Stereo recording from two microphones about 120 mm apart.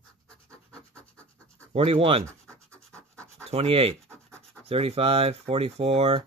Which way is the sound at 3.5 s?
55° right (ahead or behind).